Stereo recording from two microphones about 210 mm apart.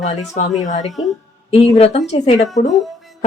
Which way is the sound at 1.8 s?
30° left (ahead or behind).